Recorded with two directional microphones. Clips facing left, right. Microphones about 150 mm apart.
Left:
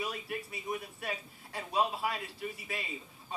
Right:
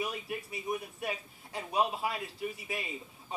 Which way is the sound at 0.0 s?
20° right (ahead or behind).